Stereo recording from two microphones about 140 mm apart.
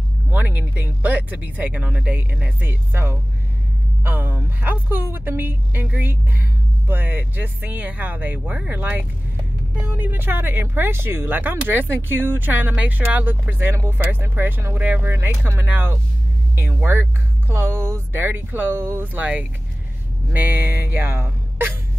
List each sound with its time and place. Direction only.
0.3 s speech: 10° right (ahead or behind)